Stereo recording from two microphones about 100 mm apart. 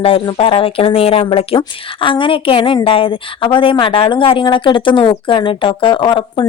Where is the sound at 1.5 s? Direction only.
60° left (ahead or behind).